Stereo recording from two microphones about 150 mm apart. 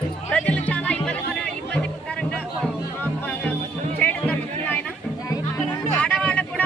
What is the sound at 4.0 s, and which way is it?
Music, 10° left (ahead or behind).